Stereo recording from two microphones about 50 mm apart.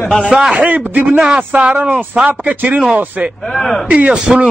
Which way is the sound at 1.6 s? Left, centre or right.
Right.